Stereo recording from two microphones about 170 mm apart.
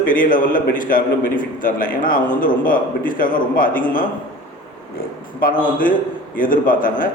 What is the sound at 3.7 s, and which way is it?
Speech, 10° left (ahead or behind).